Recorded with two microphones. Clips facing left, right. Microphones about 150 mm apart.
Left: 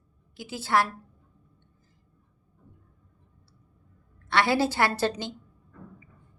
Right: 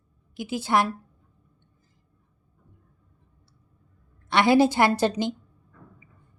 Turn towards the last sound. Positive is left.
turn(degrees=-15)  # may be behind; listen again after turning